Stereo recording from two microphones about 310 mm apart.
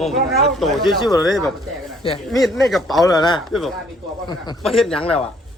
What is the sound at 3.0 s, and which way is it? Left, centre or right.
Speech, centre.